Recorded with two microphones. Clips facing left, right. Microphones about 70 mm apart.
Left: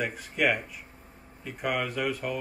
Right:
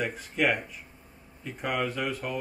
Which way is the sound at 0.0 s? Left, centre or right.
Centre.